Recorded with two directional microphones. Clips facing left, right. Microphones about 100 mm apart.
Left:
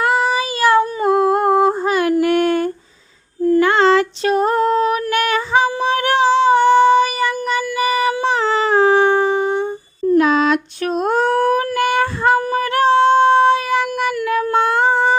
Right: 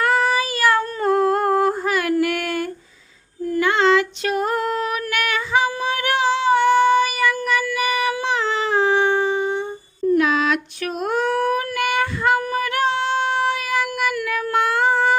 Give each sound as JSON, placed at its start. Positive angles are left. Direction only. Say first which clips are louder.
{"t": 0.0, "sound": "humming", "louder": "left 2 dB", "side_deg": 20}
{"t": 3.5, "sound": "female singing", "louder": "left 4 dB", "side_deg": 40}
{"t": 10.2, "sound": "a sound", "louder": "left 7 dB", "side_deg": 35}